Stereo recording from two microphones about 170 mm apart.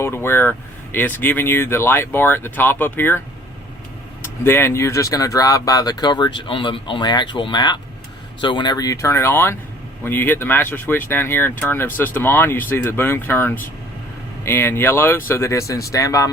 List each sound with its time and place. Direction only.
0.0 s speech: 15° left (ahead or behind)
4.2 s speech: 15° left (ahead or behind)